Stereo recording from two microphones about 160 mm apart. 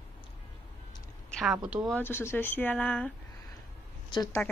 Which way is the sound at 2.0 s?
15° left (ahead or behind).